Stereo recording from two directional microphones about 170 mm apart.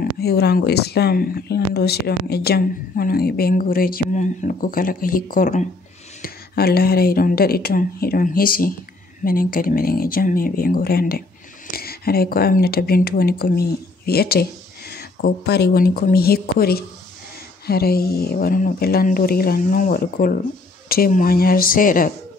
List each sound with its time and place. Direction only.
0.0 s speech: 70° left (ahead or behind); by 5.7 s 50° left (ahead or behind)
6.2 s speech: 65° left (ahead or behind)